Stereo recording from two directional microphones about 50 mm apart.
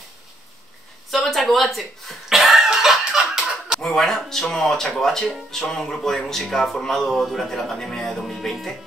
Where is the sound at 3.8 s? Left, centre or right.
Centre.